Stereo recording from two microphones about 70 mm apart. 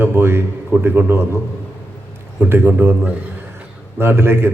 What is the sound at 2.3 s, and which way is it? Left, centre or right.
A man's voice, right.